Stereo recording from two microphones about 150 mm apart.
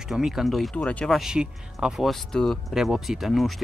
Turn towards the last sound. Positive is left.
turn(degrees=0)  # may be behind; listen again after turning